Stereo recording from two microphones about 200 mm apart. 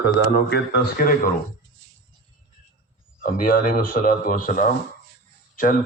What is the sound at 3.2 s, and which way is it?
A man's voice, 45° left (ahead or behind).